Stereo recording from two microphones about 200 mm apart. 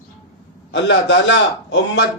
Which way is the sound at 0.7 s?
65° left (ahead or behind).